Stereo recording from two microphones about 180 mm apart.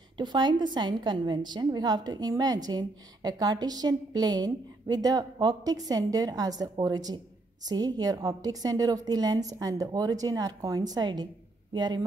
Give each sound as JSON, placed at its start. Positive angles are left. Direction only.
{"t": 0.2, "sound": "a woman's voice", "side_deg": -25}